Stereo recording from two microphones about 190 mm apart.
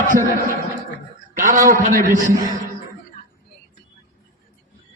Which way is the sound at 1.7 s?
45° right (ahead or behind).